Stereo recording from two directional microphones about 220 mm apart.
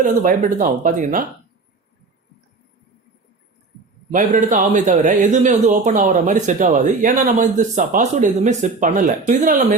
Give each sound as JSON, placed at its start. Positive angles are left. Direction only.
{"t": 0.0, "sound": "speech", "side_deg": -35}
{"t": 4.1, "sound": "speech", "side_deg": -35}